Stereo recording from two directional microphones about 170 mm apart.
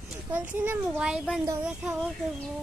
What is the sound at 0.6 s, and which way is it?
Child singing, 5° right (ahead or behind).